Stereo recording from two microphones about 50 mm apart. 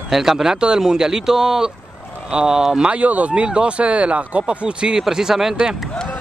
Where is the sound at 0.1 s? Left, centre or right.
Centre.